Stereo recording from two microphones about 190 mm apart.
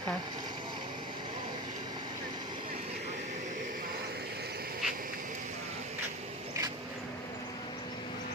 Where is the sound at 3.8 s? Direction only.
55° right (ahead or behind).